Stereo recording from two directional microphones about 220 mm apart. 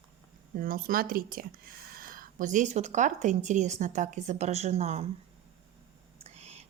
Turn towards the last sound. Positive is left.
turn(degrees=-30)  # may be behind; listen again after turning